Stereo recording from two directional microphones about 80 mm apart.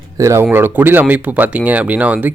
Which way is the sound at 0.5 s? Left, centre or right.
Right.